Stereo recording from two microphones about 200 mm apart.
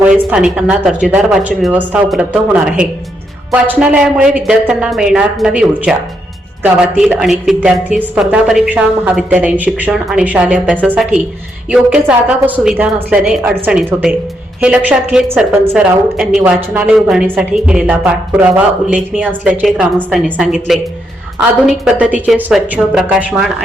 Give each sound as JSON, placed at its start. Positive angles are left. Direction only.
{"t": 0.0, "sound": "a woman's voice", "side_deg": -5}